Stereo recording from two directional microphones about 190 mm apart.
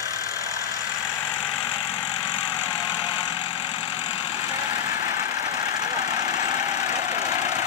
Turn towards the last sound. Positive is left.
turn(degrees=-15)  # may be behind; listen again after turning